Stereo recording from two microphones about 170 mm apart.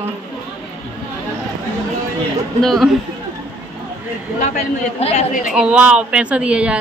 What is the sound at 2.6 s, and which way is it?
Speech, centre (ahead or behind).